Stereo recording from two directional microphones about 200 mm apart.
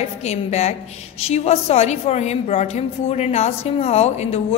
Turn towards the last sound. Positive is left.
turn(degrees=30)  # may be behind; listen again after turning